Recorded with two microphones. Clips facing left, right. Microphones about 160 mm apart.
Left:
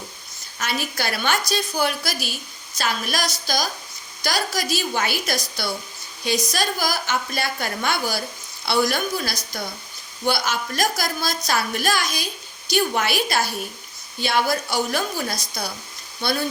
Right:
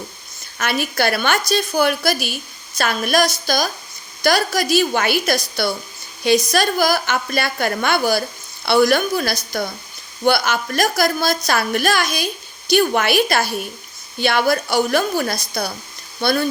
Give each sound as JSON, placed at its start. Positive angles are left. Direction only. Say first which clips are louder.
{"t": 0.6, "sound": "a woman's voice", "louder": "right 7 dB", "side_deg": -60}